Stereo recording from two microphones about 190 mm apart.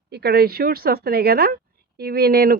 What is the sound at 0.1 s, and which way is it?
Speech, 60° right (ahead or behind).